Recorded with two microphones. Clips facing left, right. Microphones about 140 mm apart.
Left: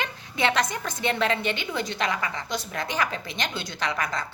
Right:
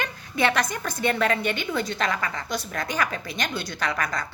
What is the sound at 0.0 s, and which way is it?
A woman's voice, 20° left (ahead or behind).